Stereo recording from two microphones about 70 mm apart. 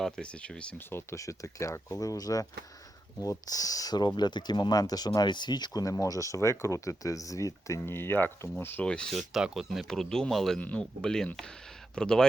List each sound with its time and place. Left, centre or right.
0.0 s speech: centre
0.8 s speech: left
1.1 s speech: left
5.8 s speech: left
7.9 s speech: left
9.1 s speech: centre
9.8 s speech: centre
10.6 s speech: centre